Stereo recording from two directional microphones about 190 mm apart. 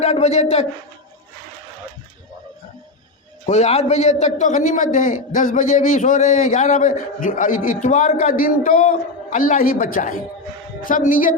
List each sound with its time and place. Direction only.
0.0 s a man's voice: 35° left (ahead or behind)
3.4 s a man's voice: 35° left (ahead or behind)